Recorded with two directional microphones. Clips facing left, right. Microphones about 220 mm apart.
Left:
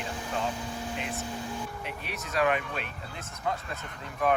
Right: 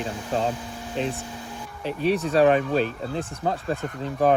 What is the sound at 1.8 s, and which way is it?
Speech, 30° right (ahead or behind).